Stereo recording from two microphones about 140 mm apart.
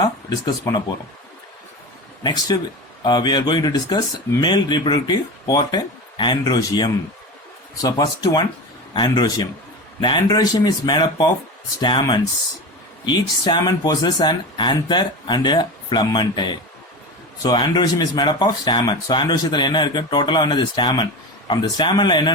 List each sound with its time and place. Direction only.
0.4 s speech: 30° left (ahead or behind)
2.2 s speech: 30° left (ahead or behind)